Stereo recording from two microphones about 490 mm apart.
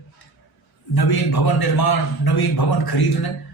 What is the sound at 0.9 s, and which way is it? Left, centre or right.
A man's voice, left.